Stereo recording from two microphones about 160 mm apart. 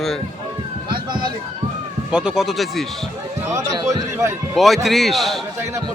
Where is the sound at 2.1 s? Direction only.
5° right (ahead or behind).